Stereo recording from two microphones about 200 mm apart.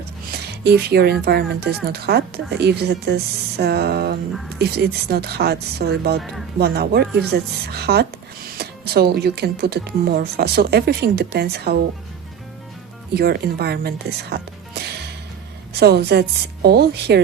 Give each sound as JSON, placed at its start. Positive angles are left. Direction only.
{"t": 0.3, "sound": "a sound", "side_deg": -55}
{"t": 1.2, "sound": "speech", "side_deg": -55}
{"t": 13.1, "sound": "a woman's voice", "side_deg": -50}